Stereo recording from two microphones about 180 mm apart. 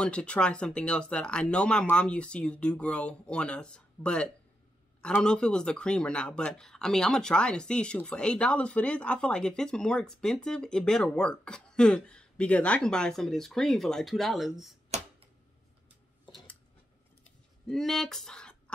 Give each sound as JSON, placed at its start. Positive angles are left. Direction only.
{"t": 0.0, "sound": "speech", "side_deg": 5}
{"t": 14.9, "sound": "typewriter", "side_deg": -40}
{"t": 17.6, "sound": "speech", "side_deg": 0}